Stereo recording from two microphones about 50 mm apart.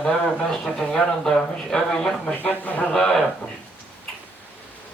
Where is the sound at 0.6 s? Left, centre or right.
Centre.